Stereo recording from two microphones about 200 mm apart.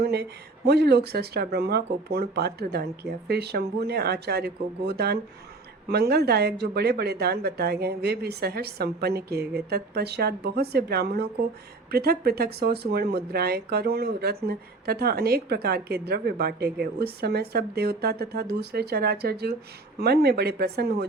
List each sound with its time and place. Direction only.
0.0 s speech: 55° right (ahead or behind)